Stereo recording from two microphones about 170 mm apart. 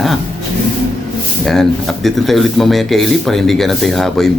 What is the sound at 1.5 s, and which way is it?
Speech, centre (ahead or behind).